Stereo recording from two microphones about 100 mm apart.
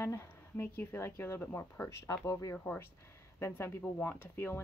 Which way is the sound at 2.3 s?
30° left (ahead or behind).